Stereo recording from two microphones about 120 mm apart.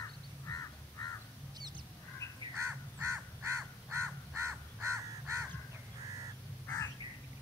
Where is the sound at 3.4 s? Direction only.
25° right (ahead or behind).